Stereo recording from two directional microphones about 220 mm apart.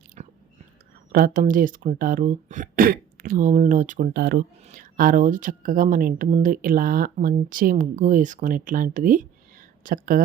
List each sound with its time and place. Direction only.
0.2 s chewing: 30° right (ahead or behind)
1.1 s speech: 40° right (ahead or behind)